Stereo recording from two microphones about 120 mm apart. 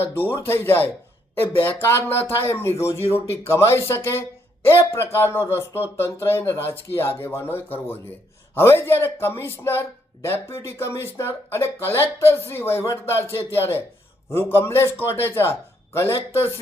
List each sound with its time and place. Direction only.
0.0 s a man's voice: 20° left (ahead or behind)